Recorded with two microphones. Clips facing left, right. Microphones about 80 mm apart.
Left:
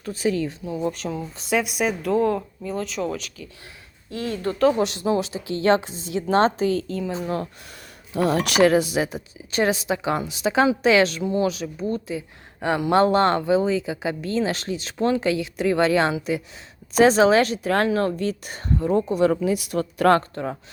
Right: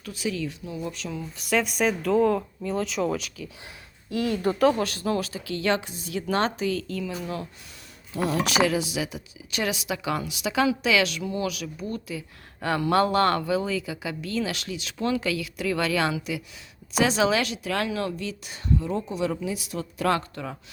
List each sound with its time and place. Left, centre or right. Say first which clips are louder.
0.0 s speech: left 6 dB; left
0.6 s a woman's voice: left 6 dB; left
0.9 s speech: left 6 dB; left
1.5 s speech: left 1 dB; centre
4.1 s a woman's voice: right 2 dB; left
8.3 s a woman's voice: left 6 dB; left